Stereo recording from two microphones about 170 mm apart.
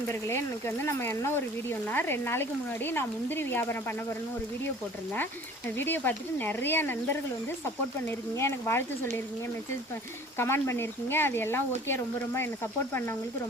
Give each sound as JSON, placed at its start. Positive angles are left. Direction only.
{"t": 0.1, "sound": "speech", "side_deg": 15}
{"t": 5.7, "sound": "speech", "side_deg": 10}
{"t": 8.4, "sound": "speech", "side_deg": 15}
{"t": 10.3, "sound": "speech", "side_deg": 15}